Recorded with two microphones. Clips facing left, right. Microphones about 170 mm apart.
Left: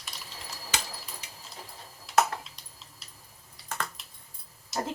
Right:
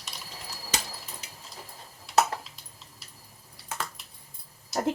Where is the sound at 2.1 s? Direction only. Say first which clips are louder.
Right 1 dB; centre (ahead or behind).